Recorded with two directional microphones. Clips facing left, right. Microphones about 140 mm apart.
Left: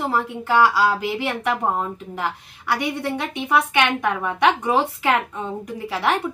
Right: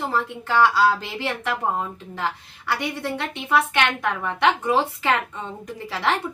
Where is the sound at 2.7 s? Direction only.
15° left (ahead or behind).